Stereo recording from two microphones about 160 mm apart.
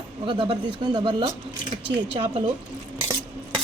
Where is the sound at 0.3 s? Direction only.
30° right (ahead or behind).